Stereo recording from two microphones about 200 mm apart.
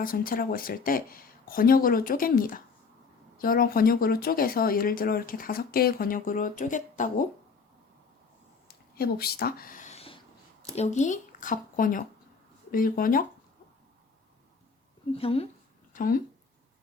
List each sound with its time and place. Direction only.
0.0 s speech: 45° left (ahead or behind)
8.6 s a sound: 50° left (ahead or behind); by 10.2 s 30° left (ahead or behind)
10.8 s speech: 35° left (ahead or behind)
15.1 s a woman's voice: 30° left (ahead or behind)
15.9 s speech: 45° left (ahead or behind)